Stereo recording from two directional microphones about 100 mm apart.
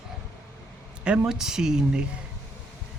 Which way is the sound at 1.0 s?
5° right (ahead or behind).